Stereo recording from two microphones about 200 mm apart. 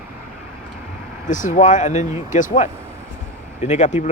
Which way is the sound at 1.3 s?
40° left (ahead or behind).